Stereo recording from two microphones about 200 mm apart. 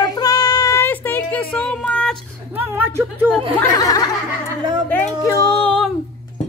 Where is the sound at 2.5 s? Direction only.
10° right (ahead or behind).